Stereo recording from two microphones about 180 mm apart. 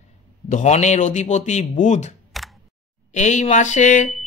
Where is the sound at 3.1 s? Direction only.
40° left (ahead or behind).